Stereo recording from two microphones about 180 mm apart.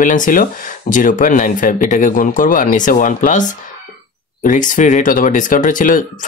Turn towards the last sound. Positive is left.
turn(degrees=45)  # may be behind; listen again after turning